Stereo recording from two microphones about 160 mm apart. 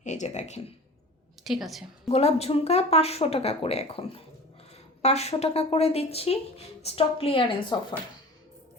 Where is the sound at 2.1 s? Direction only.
40° left (ahead or behind).